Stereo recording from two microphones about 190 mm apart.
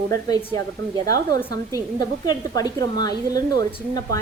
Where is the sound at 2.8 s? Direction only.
20° left (ahead or behind).